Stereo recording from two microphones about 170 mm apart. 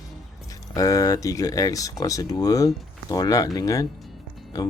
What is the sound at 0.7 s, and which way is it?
Speech, 20° left (ahead or behind).